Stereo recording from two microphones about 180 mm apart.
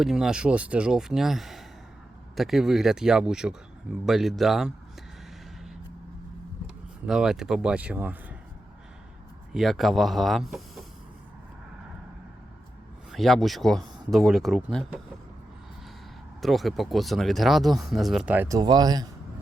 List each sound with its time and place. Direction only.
0.0 s speech: centre (ahead or behind)
7.0 s speech: 5° right (ahead or behind)
9.5 s speech: centre (ahead or behind)
13.1 s speech: centre (ahead or behind)
16.4 s speech: centre (ahead or behind)
18.4 s speech: 20° right (ahead or behind)